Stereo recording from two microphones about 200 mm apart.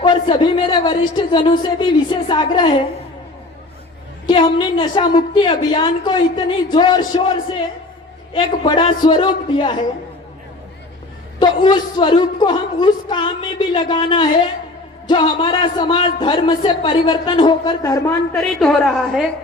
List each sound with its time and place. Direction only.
0.0 s a man's voice: 25° left (ahead or behind)
4.3 s a man's voice: 25° left (ahead or behind)
11.3 s a man's voice: 25° left (ahead or behind)
18.3 s a woman's voice: 5° left (ahead or behind)